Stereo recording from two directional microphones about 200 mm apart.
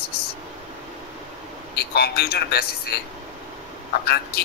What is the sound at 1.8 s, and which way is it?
A man's voice, 50° left (ahead or behind).